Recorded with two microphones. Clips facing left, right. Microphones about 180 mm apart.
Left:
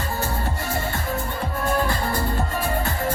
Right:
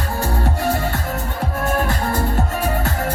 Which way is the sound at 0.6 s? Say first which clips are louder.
Right 6 dB; 80° right.